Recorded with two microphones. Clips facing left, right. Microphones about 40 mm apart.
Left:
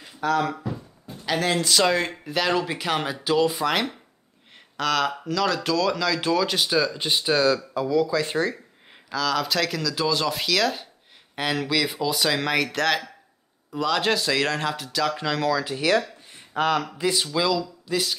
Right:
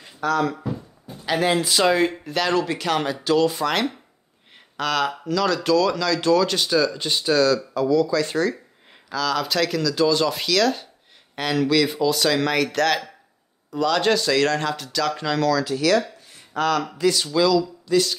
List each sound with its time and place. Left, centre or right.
0.0 s a sound: centre
1.1 s speech: centre
9.1 s speech: centre
15.4 s speech: centre
16.3 s a sound: left
16.8 s speech: centre